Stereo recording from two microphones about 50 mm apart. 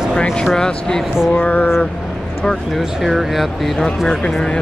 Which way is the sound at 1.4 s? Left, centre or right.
Left.